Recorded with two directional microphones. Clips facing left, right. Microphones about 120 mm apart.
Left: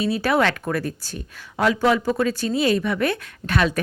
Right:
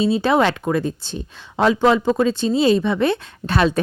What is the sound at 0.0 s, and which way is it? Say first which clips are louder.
Speech: right 4 dB; 25° right (ahead or behind).